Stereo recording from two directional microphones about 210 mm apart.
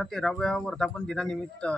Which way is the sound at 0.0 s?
Centre (ahead or behind).